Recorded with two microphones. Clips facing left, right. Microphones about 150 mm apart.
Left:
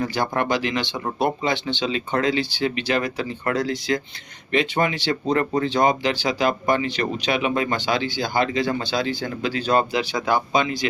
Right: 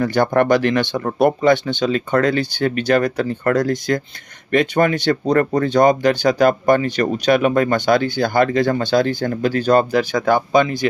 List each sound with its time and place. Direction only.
0.0 s speech: 55° right (ahead or behind)